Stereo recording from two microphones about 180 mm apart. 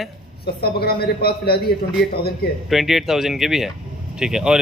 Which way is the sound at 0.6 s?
60° left (ahead or behind).